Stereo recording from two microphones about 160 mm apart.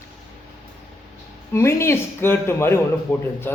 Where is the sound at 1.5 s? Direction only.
15° left (ahead or behind).